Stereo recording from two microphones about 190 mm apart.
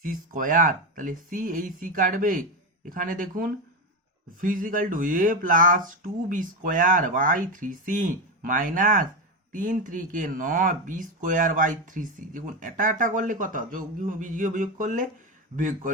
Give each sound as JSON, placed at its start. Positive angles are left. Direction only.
{"t": 0.0, "sound": "speech", "side_deg": -45}